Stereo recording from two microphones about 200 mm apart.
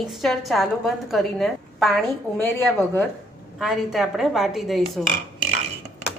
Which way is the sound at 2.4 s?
10° left (ahead or behind).